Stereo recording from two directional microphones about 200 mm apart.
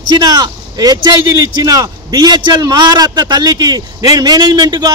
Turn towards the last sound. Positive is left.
turn(degrees=-20)  # may be behind; listen again after turning